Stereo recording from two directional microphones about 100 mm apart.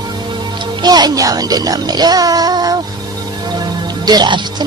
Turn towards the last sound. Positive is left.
turn(degrees=-45)  # may be behind; listen again after turning